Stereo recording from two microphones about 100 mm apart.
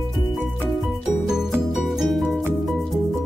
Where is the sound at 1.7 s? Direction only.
Centre (ahead or behind).